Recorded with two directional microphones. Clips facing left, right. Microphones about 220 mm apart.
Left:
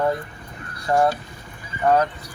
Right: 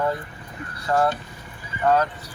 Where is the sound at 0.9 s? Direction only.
10° left (ahead or behind).